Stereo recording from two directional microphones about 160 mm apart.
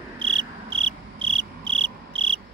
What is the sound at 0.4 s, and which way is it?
Cricket, 35° right (ahead or behind).